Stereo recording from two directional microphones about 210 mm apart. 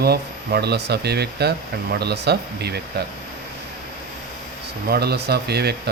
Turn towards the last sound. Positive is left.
turn(degrees=-50)  # may be behind; listen again after turning